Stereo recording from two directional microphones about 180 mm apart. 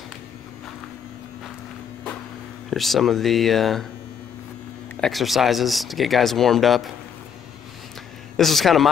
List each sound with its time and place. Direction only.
2.7 s speech: centre (ahead or behind)
5.0 s speech: centre (ahead or behind)
8.4 s speech: centre (ahead or behind)